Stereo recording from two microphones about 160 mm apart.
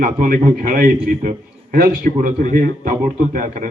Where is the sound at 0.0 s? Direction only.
60° right (ahead or behind).